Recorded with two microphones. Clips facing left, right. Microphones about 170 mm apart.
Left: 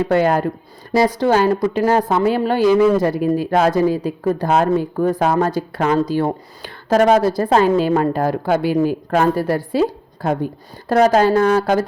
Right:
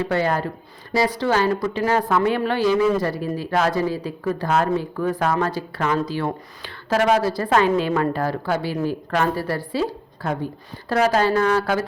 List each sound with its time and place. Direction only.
0.0 s speech: 50° left (ahead or behind)
8.7 s a woman's voice: 15° left (ahead or behind)
9.0 s speech: 40° left (ahead or behind)